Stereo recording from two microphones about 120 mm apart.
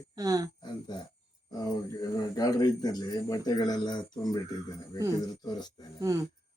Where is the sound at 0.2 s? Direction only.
30° right (ahead or behind).